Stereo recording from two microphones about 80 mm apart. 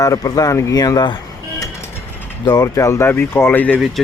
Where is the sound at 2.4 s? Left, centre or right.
Left.